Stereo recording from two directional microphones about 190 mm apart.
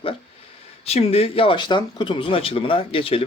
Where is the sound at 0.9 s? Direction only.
35° left (ahead or behind).